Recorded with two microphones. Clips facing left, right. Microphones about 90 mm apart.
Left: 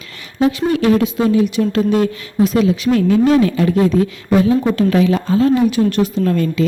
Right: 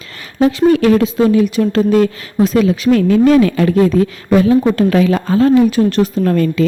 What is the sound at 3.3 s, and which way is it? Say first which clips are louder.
Speech: right 3 dB; 70° right (ahead or behind).